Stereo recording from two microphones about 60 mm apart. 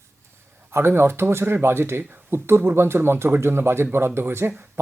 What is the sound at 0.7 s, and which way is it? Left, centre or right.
Speech, right.